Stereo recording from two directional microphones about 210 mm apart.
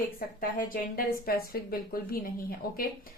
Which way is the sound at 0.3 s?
45° left (ahead or behind).